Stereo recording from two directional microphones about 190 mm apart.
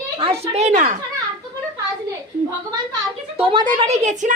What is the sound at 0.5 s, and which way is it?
Speech, 40° right (ahead or behind).